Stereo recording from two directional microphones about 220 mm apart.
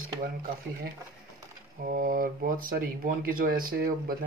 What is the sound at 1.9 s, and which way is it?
Speech, 40° right (ahead or behind).